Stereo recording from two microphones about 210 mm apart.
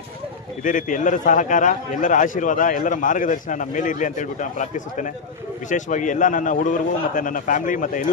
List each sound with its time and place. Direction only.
0.7 s a man's voice: 40° left (ahead or behind)